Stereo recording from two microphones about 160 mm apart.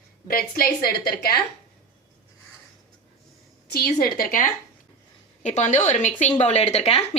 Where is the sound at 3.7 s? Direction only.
90° left.